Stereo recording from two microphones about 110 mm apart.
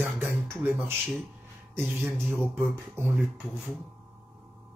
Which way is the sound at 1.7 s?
20° right (ahead or behind).